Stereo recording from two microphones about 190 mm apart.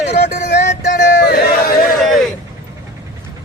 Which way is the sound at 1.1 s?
55° left (ahead or behind).